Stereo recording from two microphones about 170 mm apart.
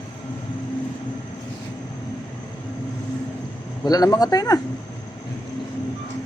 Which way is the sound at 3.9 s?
20° left (ahead or behind).